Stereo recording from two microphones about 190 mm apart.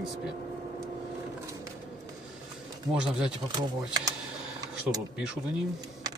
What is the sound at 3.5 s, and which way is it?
Speech, 20° right (ahead or behind).